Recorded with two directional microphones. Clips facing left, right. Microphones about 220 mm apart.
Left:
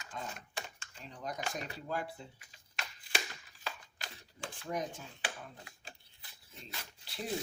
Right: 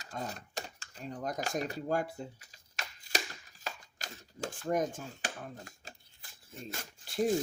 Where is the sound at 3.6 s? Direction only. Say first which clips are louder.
Right 2 dB; 45° right (ahead or behind).